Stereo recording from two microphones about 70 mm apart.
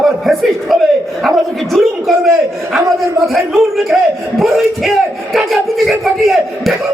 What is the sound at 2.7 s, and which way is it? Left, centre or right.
Speech, right.